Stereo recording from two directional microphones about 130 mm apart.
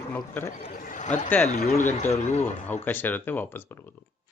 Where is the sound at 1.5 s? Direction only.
65° left (ahead or behind).